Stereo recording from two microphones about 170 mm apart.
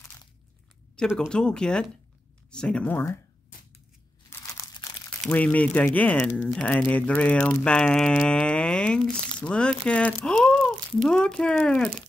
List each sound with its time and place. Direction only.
0.9 s speech: centre (ahead or behind)
4.3 s crumpling: 20° left (ahead or behind)
5.2 s speech: 10° left (ahead or behind)